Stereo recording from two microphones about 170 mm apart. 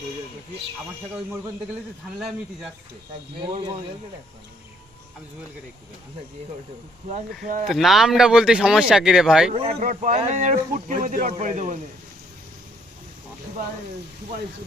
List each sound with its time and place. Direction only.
2.1 s speech: centre (ahead or behind)
7.4 s speech: 50° right (ahead or behind)
7.7 s speech: centre (ahead or behind)
9.5 s speech: 35° right (ahead or behind)
9.8 s speech: 45° right (ahead or behind)